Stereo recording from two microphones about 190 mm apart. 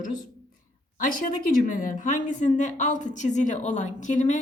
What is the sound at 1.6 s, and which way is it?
A woman's voice, 45° left (ahead or behind).